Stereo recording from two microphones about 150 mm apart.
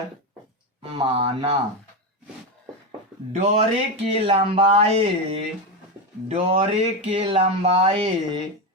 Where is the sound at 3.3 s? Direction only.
45° right (ahead or behind).